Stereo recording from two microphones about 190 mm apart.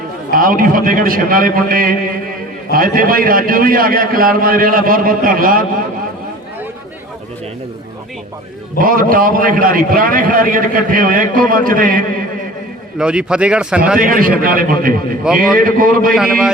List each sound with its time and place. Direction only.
0.3 s a man's voice: 45° right (ahead or behind)
8.8 s a man's voice: 50° right (ahead or behind)
13.0 s speech: 5° right (ahead or behind)
14.0 s a man's voice: 45° right (ahead or behind)
16.1 s speech: 5° right (ahead or behind)